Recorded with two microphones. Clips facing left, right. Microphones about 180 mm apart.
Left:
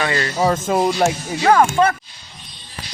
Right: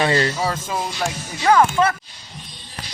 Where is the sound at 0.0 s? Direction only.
25° right (ahead or behind).